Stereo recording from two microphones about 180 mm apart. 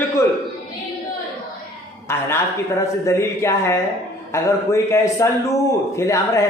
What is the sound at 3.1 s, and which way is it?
A man's voice, 15° left (ahead or behind).